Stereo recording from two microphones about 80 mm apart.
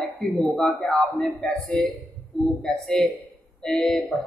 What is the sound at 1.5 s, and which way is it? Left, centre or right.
Speech, centre.